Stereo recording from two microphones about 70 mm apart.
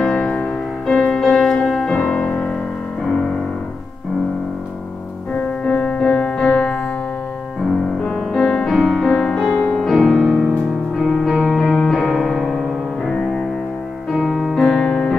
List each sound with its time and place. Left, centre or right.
0.0 s music: centre
2.2 s piano: left
5.3 s music: centre
8.0 s music: centre
8.7 s music: centre
13.1 s music: centre
14.5 s music: centre